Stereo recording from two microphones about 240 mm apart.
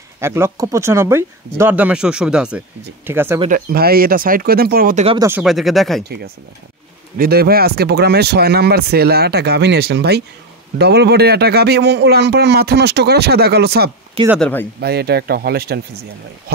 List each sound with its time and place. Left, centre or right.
0.2 s speech: centre
3.4 s speech: right
5.0 s speech: centre
5.3 s speech: centre
7.2 s a man's voice: right
14.4 s speech: centre
14.8 s speech: right